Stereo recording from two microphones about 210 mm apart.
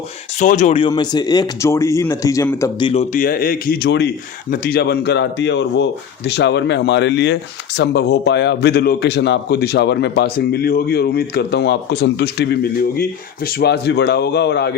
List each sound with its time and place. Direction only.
0.3 s a man's voice: 35° left (ahead or behind); by 14.7 s 55° left (ahead or behind)